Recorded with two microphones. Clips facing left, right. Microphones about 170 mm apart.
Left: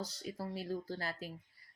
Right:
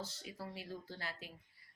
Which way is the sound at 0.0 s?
40° left (ahead or behind).